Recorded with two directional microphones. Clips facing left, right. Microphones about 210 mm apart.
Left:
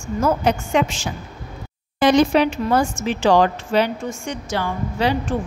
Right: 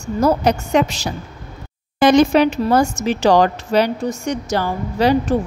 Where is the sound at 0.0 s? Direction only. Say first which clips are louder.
Right 3 dB; 35° right (ahead or behind).